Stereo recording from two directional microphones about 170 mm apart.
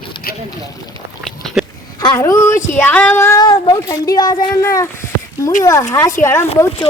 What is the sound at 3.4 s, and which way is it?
Speech, 25° left (ahead or behind).